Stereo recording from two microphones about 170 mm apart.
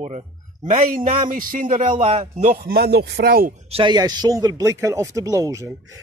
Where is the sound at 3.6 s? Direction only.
30° right (ahead or behind).